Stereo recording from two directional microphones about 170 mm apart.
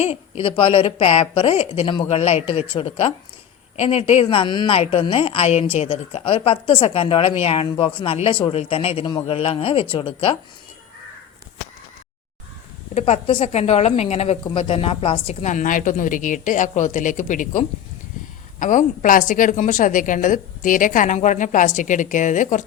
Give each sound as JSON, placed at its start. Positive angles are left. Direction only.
{"t": 0.0, "sound": "a woman's voice", "side_deg": 35}
{"t": 12.9, "sound": "a woman's voice", "side_deg": 40}